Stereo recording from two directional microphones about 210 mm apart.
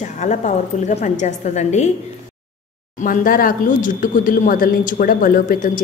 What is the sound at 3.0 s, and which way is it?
A woman's voice, 40° left (ahead or behind).